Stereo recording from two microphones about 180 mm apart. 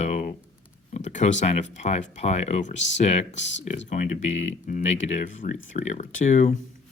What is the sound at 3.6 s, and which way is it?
Speech, 40° left (ahead or behind).